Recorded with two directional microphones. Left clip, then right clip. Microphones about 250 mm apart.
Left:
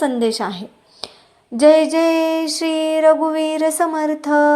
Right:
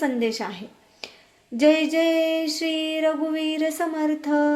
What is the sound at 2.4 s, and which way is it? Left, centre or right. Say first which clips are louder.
Music: left 6 dB; centre.